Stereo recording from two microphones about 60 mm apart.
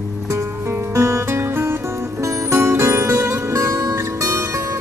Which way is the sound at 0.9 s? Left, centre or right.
Right.